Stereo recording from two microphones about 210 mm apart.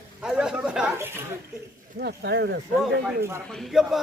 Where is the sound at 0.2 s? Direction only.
5° right (ahead or behind).